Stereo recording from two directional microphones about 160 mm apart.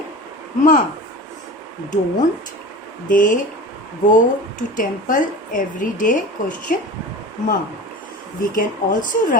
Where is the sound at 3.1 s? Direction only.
55° left (ahead or behind).